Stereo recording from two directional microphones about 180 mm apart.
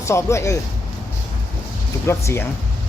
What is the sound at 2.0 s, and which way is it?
Speech, 15° left (ahead or behind).